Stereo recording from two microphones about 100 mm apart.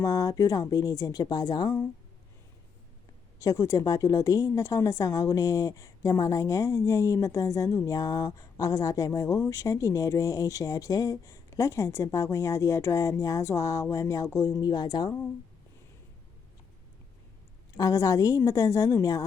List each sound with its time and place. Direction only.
0.0 s a woman's voice: 40° left (ahead or behind)
3.3 s a woman's voice: 35° left (ahead or behind)
17.7 s a woman's voice: 35° left (ahead or behind)